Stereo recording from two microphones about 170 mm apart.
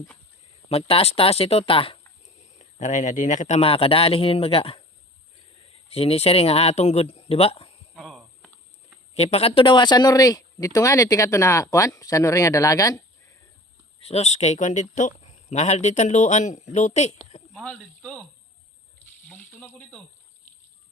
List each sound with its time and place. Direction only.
0.7 s speech: 35° left (ahead or behind)
2.6 s speech: 45° left (ahead or behind)
5.9 s speech: 35° left (ahead or behind)
7.9 s a sound: centre (ahead or behind)
9.1 s speech: 40° left (ahead or behind); by 13.0 s 20° left (ahead or behind)
14.1 s speech: 40° left (ahead or behind)
17.5 s speech: 5° left (ahead or behind)
19.3 s snake: 10° left (ahead or behind)